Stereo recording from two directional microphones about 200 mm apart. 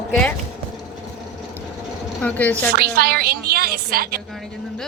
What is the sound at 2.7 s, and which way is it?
A woman's voice, 50° right (ahead or behind).